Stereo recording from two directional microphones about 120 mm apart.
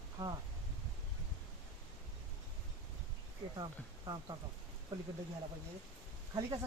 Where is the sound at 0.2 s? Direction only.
45° right (ahead or behind).